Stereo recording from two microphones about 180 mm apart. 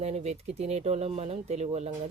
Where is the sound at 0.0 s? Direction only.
35° right (ahead or behind).